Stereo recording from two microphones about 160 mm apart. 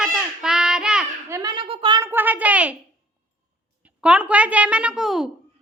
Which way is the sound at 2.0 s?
10° right (ahead or behind).